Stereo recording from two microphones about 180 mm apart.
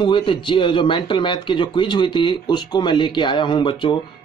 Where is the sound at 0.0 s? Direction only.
25° left (ahead or behind).